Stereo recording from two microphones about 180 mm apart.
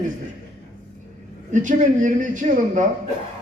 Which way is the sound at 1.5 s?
45° right (ahead or behind).